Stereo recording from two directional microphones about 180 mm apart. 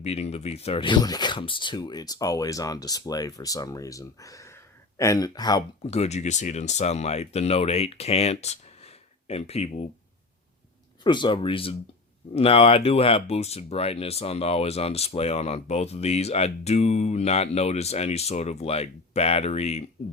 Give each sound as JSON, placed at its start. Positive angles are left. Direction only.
{"t": 0.0, "sound": "speech", "side_deg": 35}
{"t": 5.9, "sound": "speech", "side_deg": 35}
{"t": 11.0, "sound": "speech", "side_deg": 25}